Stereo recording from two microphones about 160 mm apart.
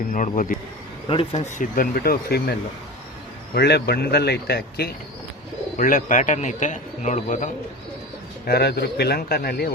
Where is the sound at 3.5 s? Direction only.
90° left.